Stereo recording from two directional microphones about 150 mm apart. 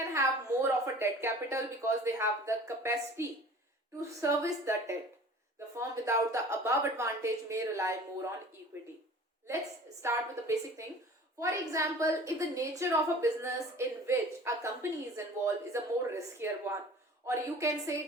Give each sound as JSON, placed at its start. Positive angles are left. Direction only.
{"t": 0.1, "sound": "a woman's voice", "side_deg": -20}
{"t": 10.0, "sound": "a woman's voice", "side_deg": -20}